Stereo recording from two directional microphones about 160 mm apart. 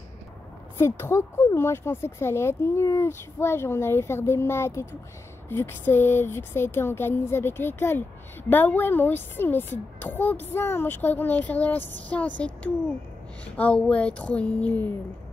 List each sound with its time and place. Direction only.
0.7 s speech: 15° left (ahead or behind)